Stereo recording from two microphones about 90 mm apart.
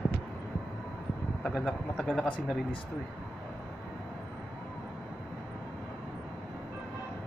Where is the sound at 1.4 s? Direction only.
5° left (ahead or behind).